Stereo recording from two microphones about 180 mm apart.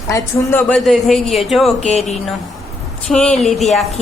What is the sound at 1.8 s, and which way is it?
Speech, 40° left (ahead or behind).